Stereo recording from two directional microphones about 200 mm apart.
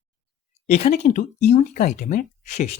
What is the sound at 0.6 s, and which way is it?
Speech, 35° left (ahead or behind).